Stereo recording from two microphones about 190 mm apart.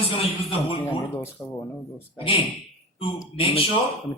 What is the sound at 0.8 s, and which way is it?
Speech, 10° left (ahead or behind).